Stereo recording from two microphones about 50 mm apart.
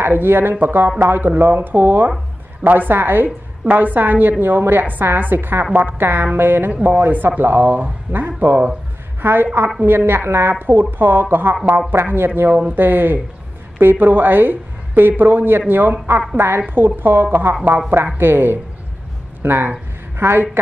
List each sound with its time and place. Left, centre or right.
0.0 s speech: right
1.0 s speech: right
5.7 s speech: right
5.9 s speech: right
10.5 s speech: right
12.4 s a woman's voice: right
16.3 s speech: right
17.6 s speech: right
18.2 s speech: right